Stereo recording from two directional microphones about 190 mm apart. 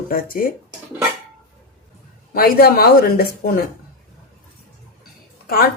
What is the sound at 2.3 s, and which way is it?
Speech, 50° left (ahead or behind).